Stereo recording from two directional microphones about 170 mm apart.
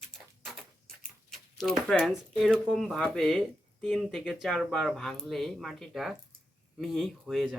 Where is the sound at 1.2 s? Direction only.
Centre (ahead or behind).